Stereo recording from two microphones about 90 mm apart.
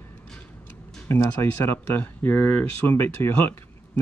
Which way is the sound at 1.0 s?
30° left (ahead or behind).